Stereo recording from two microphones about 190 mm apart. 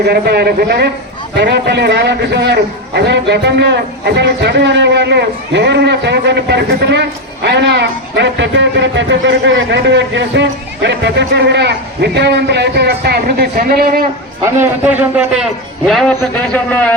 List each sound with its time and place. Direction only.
0.0 s speech: 55° right (ahead or behind)
14.4 s a man's voice: 10° right (ahead or behind)
15.9 s a man's voice: 5° left (ahead or behind)